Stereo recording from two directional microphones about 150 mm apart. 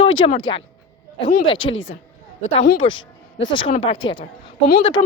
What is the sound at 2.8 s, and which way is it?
Speech, 30° left (ahead or behind).